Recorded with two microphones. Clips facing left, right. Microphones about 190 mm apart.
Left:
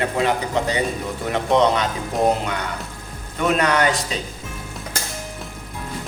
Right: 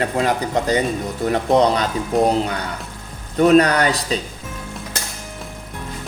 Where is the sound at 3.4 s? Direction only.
35° right (ahead or behind).